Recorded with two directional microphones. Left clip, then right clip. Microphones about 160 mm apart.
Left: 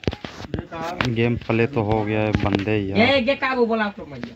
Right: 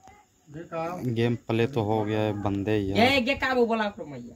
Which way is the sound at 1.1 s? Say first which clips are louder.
Left 4 dB; 10° right (ahead or behind).